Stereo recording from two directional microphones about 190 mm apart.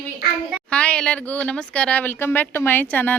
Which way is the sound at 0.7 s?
5° left (ahead or behind).